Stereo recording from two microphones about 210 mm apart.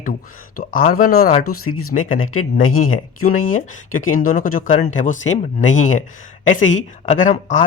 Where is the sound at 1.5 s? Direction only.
90° left.